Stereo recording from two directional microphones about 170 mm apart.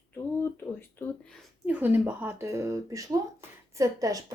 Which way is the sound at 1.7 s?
10° right (ahead or behind).